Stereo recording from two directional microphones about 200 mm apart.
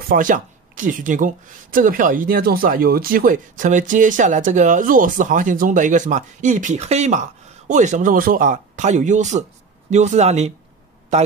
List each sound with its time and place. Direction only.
0.1 s speech: 40° right (ahead or behind)